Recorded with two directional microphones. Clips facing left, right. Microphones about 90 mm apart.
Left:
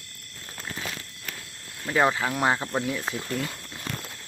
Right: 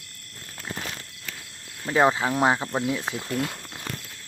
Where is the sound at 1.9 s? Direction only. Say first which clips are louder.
Right 2 dB; 15° right (ahead or behind).